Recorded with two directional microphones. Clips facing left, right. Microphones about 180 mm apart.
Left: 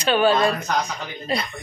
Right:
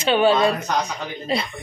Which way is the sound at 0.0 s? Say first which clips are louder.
Right 1 dB; 25° right (ahead or behind).